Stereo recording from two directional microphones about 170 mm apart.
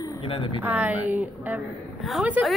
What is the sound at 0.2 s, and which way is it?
Speech, 30° left (ahead or behind).